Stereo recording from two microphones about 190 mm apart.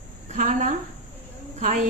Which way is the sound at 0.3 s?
40° right (ahead or behind).